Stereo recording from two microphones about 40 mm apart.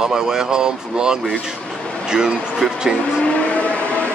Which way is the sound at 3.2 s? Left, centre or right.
Left.